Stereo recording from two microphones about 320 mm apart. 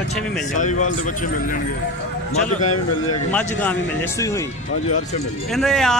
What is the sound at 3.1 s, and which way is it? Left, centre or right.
Speech, centre.